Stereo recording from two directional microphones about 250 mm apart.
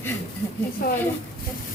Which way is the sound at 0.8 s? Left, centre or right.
Left.